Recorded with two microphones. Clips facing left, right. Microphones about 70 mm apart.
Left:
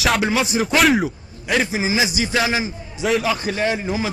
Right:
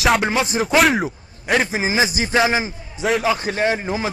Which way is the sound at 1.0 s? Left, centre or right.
Right.